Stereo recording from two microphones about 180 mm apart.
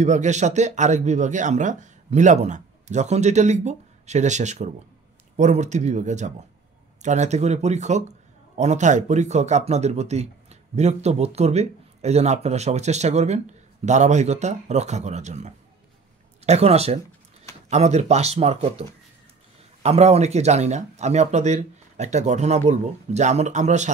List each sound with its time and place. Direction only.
0.0 s speech: 40° right (ahead or behind)